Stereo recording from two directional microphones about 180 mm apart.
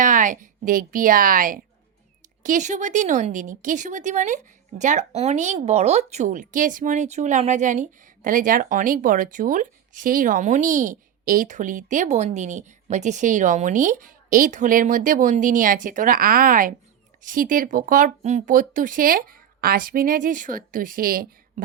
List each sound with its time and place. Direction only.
0.0 s speech: 45° right (ahead or behind)